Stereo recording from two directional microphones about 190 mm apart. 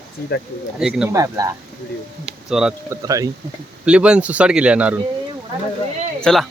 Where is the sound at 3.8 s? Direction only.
5° right (ahead or behind).